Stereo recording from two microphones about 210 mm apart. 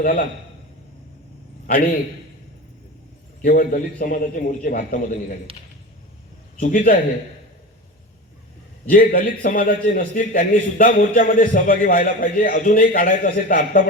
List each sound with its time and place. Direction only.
0.0 s a man's voice: 40° left (ahead or behind)
3.4 s a man's voice: 40° left (ahead or behind)
6.6 s a man's voice: 40° left (ahead or behind)
8.9 s a man's voice: 40° left (ahead or behind)